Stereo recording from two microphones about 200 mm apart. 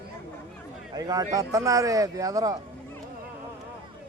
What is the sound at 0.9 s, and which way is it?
A man's voice, 20° right (ahead or behind).